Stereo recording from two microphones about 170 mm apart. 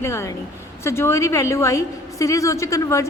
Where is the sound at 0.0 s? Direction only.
15° left (ahead or behind).